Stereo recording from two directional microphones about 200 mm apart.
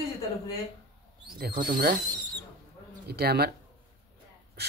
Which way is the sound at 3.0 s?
50° right (ahead or behind).